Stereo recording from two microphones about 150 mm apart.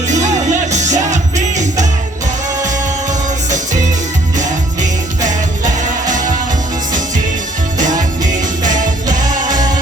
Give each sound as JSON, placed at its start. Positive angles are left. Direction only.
{"t": 0.7, "sound": "music", "side_deg": -55}
{"t": 3.1, "sound": "music", "side_deg": -55}
{"t": 4.4, "sound": "jingle bell", "side_deg": -55}
{"t": 7.8, "sound": "music", "side_deg": -60}